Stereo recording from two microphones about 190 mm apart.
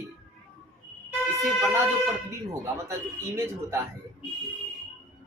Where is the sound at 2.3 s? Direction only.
15° right (ahead or behind).